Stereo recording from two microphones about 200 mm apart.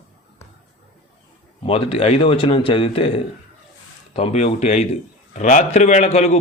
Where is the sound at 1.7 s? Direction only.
30° left (ahead or behind).